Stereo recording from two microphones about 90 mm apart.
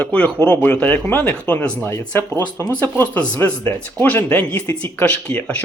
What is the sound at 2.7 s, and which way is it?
Speech, 15° left (ahead or behind).